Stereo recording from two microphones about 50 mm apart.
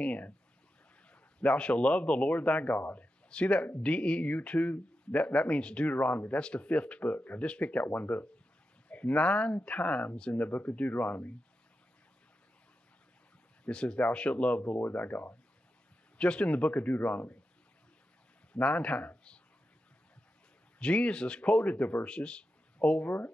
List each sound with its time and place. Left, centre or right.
0.0 s speech: left
10.3 s speech: left
13.7 s speech: left
14.8 s speech: left
16.2 s speech: left
18.5 s speech: left
20.8 s speech: left
23.0 s speech: left